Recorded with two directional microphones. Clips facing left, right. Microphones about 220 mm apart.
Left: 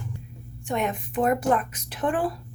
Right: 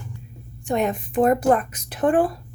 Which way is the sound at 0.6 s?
35° right (ahead or behind).